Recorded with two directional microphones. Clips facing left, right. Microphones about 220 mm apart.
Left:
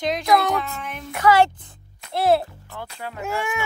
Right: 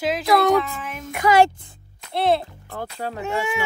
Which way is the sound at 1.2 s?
15° right (ahead or behind).